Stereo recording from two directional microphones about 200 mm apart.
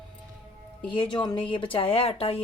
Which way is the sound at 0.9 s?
25° left (ahead or behind).